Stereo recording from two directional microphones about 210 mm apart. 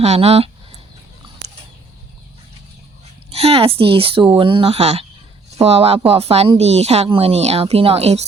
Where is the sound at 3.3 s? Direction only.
30° right (ahead or behind).